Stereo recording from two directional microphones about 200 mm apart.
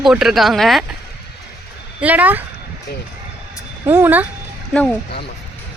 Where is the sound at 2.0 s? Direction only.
10° right (ahead or behind).